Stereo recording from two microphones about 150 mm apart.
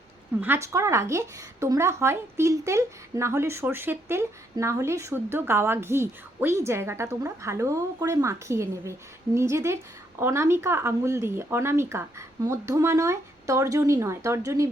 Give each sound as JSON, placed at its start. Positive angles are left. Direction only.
{"t": 0.4, "sound": "a woman's voice", "side_deg": -15}